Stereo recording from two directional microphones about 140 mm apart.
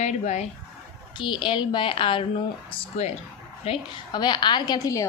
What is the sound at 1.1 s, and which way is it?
A woman's voice, 35° left (ahead or behind).